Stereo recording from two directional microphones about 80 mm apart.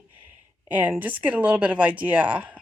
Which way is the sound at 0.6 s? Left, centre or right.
Centre.